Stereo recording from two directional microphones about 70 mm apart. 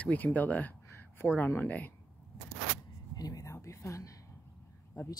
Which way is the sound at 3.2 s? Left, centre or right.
Left.